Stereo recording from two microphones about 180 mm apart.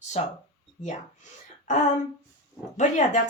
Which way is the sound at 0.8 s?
40° left (ahead or behind).